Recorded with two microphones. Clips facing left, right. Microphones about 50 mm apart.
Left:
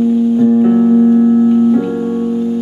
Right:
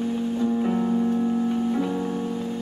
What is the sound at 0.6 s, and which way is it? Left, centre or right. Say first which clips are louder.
Music: left 14 dB; left.